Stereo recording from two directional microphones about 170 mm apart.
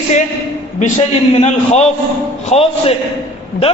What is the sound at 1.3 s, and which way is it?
A man's voice, 40° left (ahead or behind).